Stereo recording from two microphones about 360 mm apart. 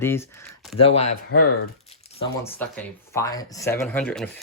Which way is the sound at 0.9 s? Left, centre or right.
Left.